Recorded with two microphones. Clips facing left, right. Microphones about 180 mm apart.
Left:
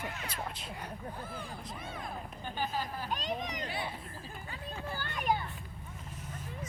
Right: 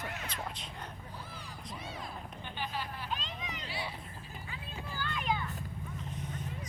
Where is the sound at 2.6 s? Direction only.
40° left (ahead or behind).